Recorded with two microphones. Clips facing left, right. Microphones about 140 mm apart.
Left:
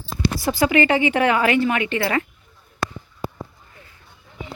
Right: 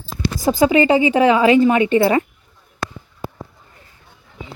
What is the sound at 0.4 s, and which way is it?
A woman's voice, 20° right (ahead or behind).